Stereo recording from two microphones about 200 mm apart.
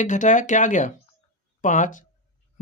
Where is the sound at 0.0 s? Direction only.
40° left (ahead or behind).